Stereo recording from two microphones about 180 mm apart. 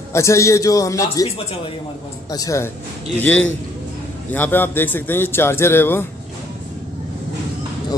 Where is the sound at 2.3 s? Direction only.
20° left (ahead or behind).